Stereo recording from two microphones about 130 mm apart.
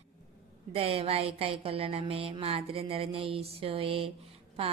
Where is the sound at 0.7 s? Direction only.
50° right (ahead or behind).